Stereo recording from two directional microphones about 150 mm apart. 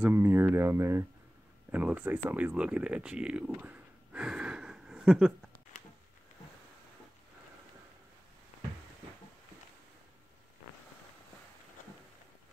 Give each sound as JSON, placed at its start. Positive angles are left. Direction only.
{"t": 0.0, "sound": "speech", "side_deg": -15}